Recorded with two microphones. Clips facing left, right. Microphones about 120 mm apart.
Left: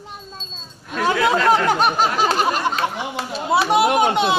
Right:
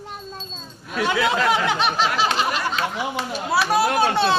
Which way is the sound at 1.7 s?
45° left (ahead or behind).